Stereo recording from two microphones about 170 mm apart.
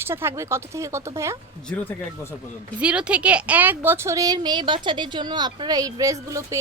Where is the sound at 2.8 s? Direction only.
5° right (ahead or behind).